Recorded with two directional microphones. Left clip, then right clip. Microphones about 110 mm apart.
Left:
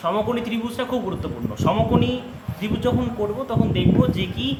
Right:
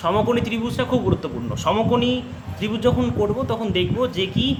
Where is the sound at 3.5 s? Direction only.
80° right; by 4.5 s 60° right (ahead or behind).